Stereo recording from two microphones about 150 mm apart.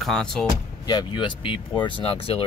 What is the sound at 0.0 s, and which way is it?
Speech, 5° left (ahead or behind).